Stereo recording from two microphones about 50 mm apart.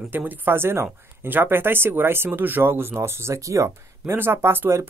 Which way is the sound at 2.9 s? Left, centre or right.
Right.